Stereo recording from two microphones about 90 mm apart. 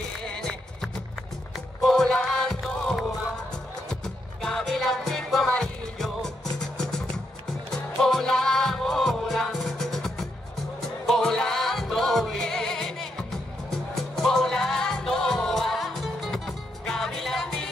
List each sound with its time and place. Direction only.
0.2 s music: 5° left (ahead or behind)
1.8 s music: 5° left (ahead or behind)
4.4 s music: 5° left (ahead or behind)
8.0 s music: 5° left (ahead or behind)